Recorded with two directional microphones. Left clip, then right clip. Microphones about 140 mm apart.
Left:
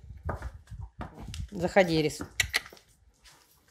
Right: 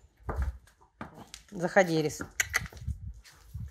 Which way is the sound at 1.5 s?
15° left (ahead or behind).